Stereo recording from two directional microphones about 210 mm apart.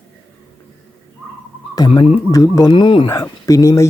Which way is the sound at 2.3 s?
15° left (ahead or behind).